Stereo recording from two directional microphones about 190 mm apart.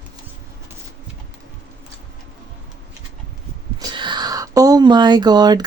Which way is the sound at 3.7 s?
20° right (ahead or behind).